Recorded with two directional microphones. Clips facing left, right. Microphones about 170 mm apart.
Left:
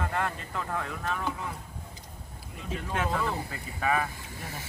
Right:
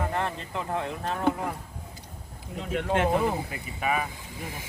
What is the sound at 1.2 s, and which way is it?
Speech, 55° right (ahead or behind).